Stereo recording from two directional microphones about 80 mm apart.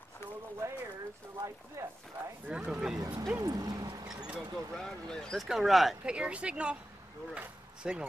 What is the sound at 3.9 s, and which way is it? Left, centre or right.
Vehicle, right.